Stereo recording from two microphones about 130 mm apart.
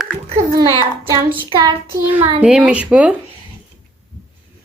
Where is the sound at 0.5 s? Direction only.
30° right (ahead or behind).